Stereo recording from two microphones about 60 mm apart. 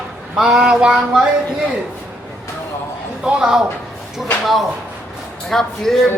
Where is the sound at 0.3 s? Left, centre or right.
Centre.